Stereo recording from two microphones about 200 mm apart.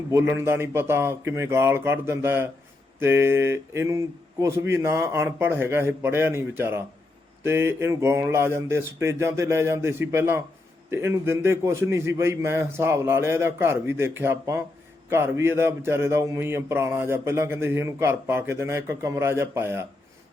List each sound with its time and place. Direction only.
0.1 s speech: 10° right (ahead or behind)